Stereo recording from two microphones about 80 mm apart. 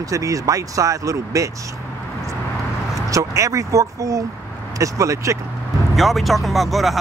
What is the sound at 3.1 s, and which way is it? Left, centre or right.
Speech, right.